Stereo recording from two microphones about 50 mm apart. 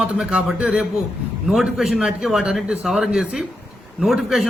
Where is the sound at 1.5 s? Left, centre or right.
Centre.